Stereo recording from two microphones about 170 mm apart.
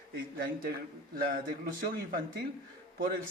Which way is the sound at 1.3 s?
60° right (ahead or behind).